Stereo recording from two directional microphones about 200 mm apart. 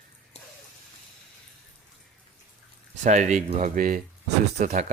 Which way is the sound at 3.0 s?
35° right (ahead or behind).